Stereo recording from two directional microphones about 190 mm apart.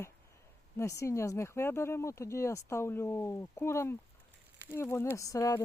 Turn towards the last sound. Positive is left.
turn(degrees=15)  # may be behind; listen again after turning